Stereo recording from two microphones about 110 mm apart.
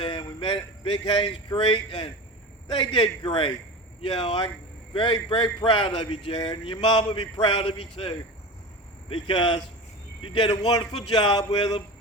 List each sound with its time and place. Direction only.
0.0 s a man's voice: 50° left (ahead or behind)
7.5 s a man's voice: 55° left (ahead or behind); by 11.8 s 40° left (ahead or behind)